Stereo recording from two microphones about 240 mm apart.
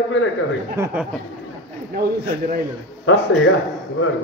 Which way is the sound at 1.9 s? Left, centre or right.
Right.